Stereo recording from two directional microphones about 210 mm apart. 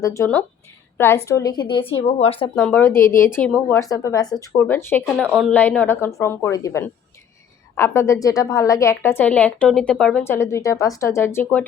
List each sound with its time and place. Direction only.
0.0 s a woman's voice: 15° left (ahead or behind)
2.6 s a woman's voice: 5° left (ahead or behind)